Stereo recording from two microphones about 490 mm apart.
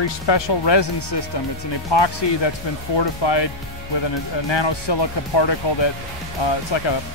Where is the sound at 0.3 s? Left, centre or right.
Left.